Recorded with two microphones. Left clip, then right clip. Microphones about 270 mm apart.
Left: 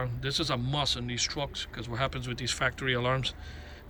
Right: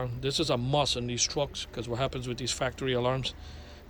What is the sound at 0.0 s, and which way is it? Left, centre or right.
Speech, centre.